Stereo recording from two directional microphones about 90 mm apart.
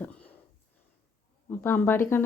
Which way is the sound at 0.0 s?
15° left (ahead or behind).